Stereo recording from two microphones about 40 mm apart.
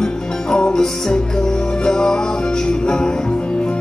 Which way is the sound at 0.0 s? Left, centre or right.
Left.